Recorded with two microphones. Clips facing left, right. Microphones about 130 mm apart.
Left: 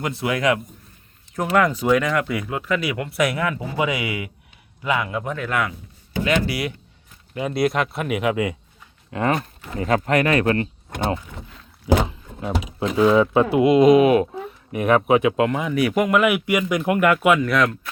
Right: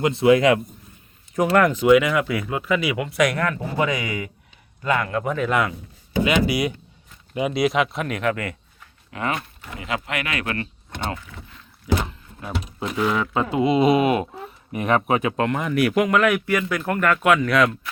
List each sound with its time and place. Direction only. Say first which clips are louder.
0.0 s a man's voice: right 6 dB; 25° right (ahead or behind)
1.5 s speech: right 2 dB; centre (ahead or behind)
5.4 s a man's voice: right 3 dB; 20° right (ahead or behind)
7.5 s speech: left 1 dB; centre (ahead or behind); by 8.5 s 15° left (ahead or behind)
9.1 s speech: left 5 dB; 35° left (ahead or behind)
10.8 s power windows: left 5 dB; 45° left (ahead or behind)
12.5 s speech: left 3 dB; 90° left
13.0 s speech: left 7 dB; 20° left (ahead or behind)
13.7 s speech: left 4 dB; 5° right (ahead or behind)